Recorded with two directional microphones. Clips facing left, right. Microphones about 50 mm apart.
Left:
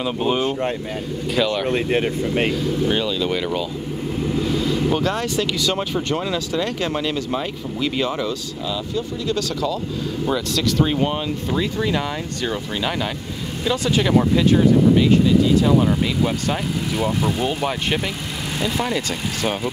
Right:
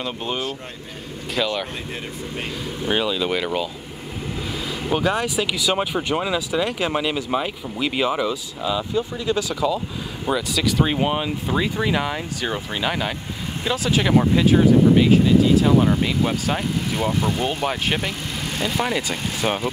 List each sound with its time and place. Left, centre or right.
0.0 s speech: centre
1.7 s speech: left
2.5 s speech: centre